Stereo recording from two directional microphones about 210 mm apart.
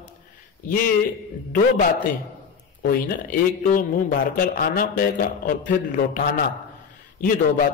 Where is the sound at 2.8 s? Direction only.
45° left (ahead or behind).